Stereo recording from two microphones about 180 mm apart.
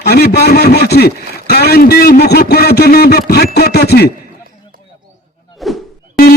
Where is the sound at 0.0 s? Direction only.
60° left (ahead or behind).